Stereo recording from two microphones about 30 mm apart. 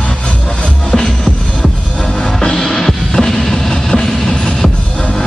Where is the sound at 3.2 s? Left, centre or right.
Centre.